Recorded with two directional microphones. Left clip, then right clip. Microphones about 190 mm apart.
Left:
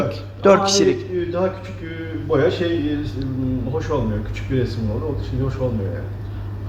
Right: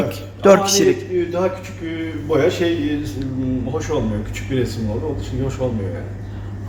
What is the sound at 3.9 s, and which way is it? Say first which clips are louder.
A man's voice: right 1 dB; 15° right (ahead or behind).